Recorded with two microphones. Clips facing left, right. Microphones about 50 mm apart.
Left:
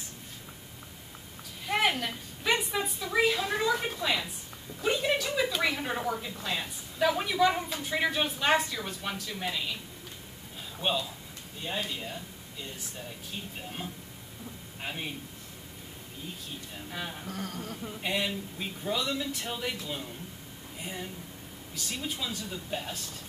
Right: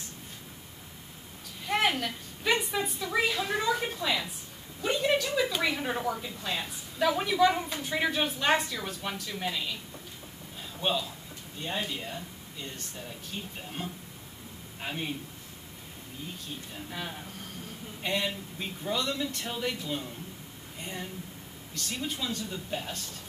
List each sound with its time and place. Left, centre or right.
1.7 s a sound: centre
4.8 s speech: centre
10.8 s a man's voice: centre
13.8 s speech: centre
16.9 s speech: centre
17.3 s a sound: left
18.0 s speech: centre